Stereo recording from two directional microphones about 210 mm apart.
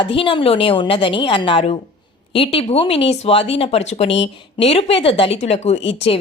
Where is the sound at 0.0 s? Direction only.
25° left (ahead or behind).